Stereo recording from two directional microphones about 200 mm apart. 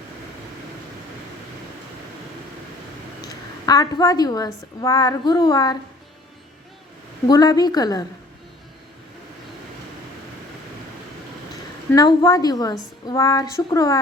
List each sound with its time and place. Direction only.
3.2 s a woman's voice: 20° left (ahead or behind)
7.3 s a woman's voice: 20° left (ahead or behind)
11.9 s a woman's voice: 20° left (ahead or behind)